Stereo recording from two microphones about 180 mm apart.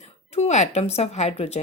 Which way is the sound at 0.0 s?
40° left (ahead or behind).